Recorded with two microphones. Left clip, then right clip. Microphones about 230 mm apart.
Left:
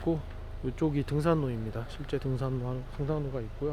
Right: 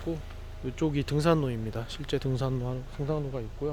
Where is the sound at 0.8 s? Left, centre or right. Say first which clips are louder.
Right 2 dB; centre.